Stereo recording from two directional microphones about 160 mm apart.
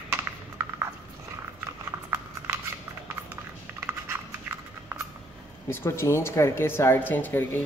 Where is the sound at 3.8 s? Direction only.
15° right (ahead or behind).